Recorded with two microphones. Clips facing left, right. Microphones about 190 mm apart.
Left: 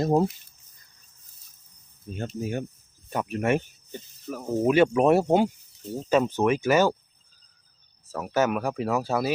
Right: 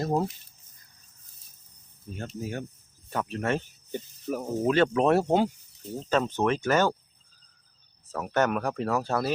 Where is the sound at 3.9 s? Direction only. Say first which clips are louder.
Right 4 dB; 15° right (ahead or behind).